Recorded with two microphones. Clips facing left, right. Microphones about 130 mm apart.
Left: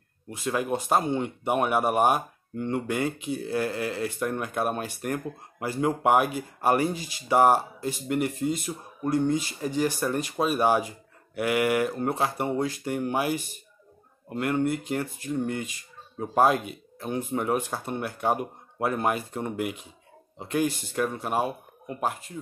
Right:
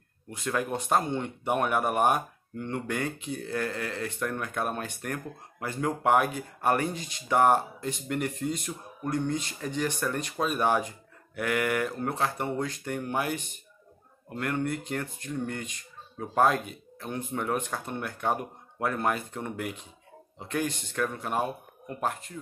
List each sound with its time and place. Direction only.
0.3 s speech: 10° left (ahead or behind)
14.4 s speech: 10° left (ahead or behind)
17.6 s speech: 10° left (ahead or behind)